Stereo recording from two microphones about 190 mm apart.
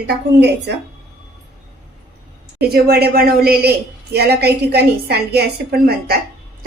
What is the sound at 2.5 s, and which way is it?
A woman's voice, 55° right (ahead or behind).